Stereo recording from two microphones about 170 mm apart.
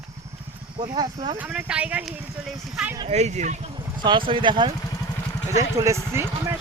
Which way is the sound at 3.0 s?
40° right (ahead or behind).